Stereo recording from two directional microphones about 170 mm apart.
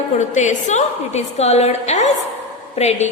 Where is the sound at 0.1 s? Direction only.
45° left (ahead or behind).